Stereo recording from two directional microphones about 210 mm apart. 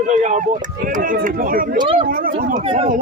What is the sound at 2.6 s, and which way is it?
Speech, 25° right (ahead or behind).